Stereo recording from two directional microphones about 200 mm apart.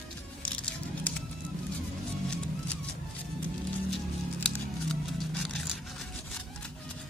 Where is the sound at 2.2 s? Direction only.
5° left (ahead or behind).